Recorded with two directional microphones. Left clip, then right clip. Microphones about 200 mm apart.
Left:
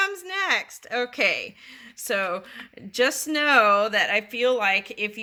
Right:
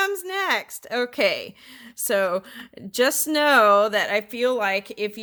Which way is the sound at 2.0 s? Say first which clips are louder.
Right 4 dB; 45° right (ahead or behind).